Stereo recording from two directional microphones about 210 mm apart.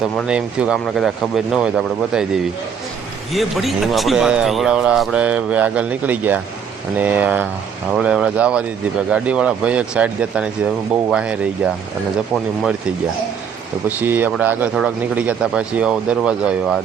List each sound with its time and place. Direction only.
0.0 s a man's voice: 5° right (ahead or behind)
13.8 s a man's voice: 10° right (ahead or behind)